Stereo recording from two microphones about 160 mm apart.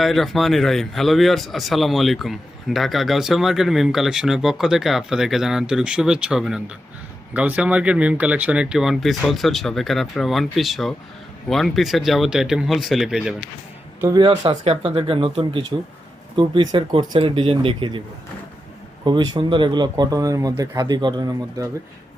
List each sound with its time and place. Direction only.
0.0 s speech: centre (ahead or behind)
14.2 s speech: 35° right (ahead or behind)
19.0 s speech: 25° right (ahead or behind)